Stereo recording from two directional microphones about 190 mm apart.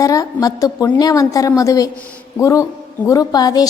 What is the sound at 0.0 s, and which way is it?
A woman's voice, 15° left (ahead or behind).